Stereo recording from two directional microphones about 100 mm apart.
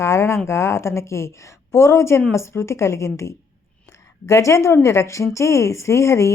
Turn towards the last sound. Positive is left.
turn(degrees=30)  # may be behind; listen again after turning